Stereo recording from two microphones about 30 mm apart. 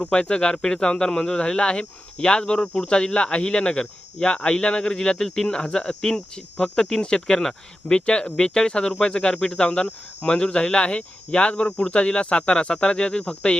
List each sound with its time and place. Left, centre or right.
0.1 s speech: left